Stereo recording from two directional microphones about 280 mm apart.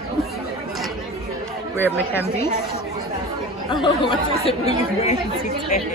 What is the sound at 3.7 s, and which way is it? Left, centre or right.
Speech, centre.